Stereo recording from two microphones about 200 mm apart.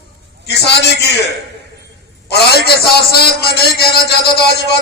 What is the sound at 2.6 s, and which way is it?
A man's voice, 50° left (ahead or behind).